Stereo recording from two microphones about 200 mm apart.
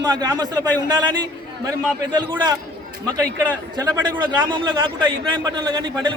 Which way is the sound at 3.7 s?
20° right (ahead or behind).